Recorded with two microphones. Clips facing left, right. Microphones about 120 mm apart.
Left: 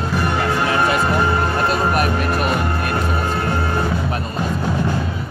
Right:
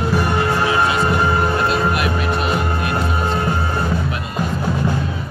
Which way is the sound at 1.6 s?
45° left (ahead or behind).